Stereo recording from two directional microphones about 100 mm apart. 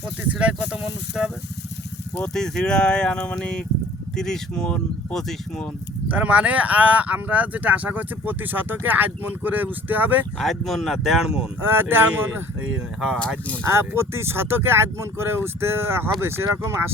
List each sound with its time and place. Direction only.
0.3 s speech: 15° right (ahead or behind)
2.1 s speech: 5° left (ahead or behind)
6.1 s speech: 15° right (ahead or behind)
10.3 s speech: centre (ahead or behind)
11.6 s speech: 20° right (ahead or behind)
12.7 s speech: 5° right (ahead or behind)
13.7 s speech: 25° right (ahead or behind)